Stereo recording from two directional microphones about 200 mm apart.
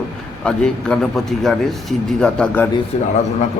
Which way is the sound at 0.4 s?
5° left (ahead or behind).